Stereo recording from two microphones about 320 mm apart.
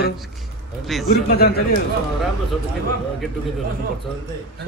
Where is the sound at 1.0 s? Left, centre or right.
Left.